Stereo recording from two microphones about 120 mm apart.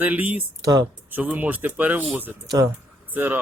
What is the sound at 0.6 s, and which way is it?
Speech, 30° right (ahead or behind).